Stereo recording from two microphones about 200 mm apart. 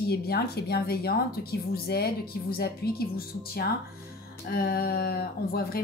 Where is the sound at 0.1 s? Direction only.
50° left (ahead or behind).